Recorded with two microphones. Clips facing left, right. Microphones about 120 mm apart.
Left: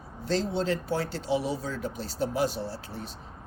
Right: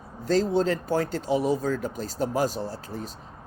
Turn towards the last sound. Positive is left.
turn(degrees=-40)  # may be behind; listen again after turning